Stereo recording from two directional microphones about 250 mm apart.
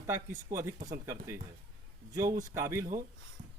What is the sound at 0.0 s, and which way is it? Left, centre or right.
Speech, centre.